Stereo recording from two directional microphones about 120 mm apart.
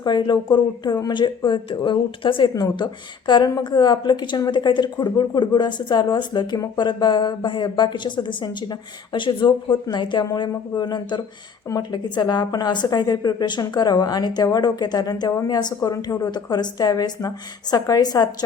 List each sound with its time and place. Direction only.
0.0 s a woman's voice: 35° left (ahead or behind)